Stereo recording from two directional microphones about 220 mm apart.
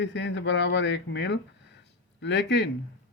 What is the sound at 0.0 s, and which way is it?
Speech, 55° left (ahead or behind).